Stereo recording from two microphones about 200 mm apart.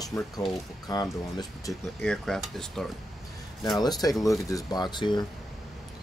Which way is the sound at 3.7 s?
20° left (ahead or behind).